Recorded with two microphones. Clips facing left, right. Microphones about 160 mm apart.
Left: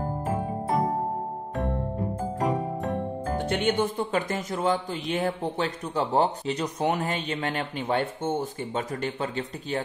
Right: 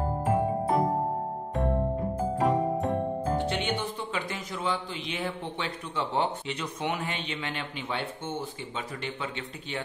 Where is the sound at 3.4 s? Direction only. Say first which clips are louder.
Left 5 dB; 50° left (ahead or behind).